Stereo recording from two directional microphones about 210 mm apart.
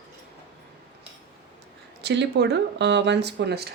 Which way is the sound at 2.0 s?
55° right (ahead or behind).